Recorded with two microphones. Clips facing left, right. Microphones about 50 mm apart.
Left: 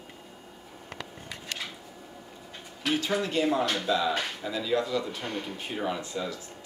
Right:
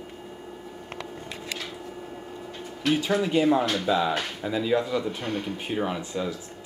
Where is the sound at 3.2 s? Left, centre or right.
Centre.